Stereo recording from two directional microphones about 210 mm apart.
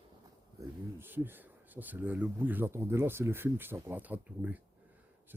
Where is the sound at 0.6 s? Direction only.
10° right (ahead or behind).